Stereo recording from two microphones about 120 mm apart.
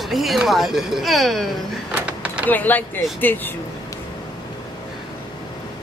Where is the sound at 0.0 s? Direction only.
Centre (ahead or behind).